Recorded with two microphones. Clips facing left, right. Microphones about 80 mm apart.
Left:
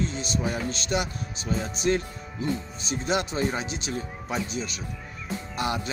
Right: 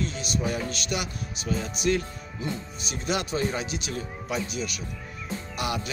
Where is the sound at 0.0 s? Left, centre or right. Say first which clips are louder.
Left 1 dB; left.